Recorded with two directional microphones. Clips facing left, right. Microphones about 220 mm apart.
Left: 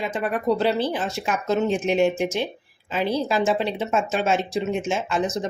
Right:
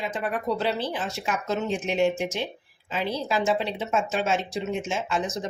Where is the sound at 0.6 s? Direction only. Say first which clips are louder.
Left 5 dB; 40° left (ahead or behind).